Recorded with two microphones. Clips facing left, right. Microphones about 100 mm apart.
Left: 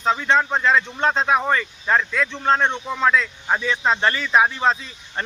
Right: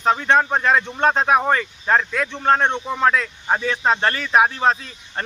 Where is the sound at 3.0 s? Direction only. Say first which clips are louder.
Even; 45° right (ahead or behind).